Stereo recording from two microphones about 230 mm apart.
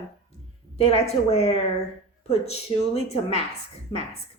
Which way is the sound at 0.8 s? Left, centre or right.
Left.